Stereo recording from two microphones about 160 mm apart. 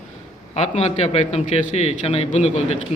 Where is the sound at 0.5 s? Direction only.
40° left (ahead or behind).